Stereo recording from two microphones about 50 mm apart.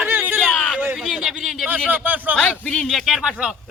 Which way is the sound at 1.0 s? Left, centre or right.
Centre.